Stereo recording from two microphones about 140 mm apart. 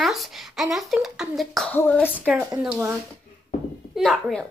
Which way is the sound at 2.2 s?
10° right (ahead or behind).